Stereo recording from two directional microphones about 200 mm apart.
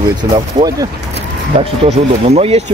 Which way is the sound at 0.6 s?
30° right (ahead or behind).